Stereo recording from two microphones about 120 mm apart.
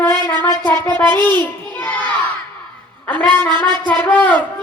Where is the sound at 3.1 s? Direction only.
15° left (ahead or behind).